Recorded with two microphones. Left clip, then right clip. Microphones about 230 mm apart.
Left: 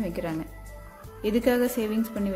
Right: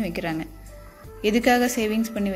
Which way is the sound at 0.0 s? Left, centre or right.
Centre.